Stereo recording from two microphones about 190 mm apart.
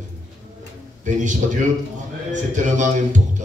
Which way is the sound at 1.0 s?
40° right (ahead or behind).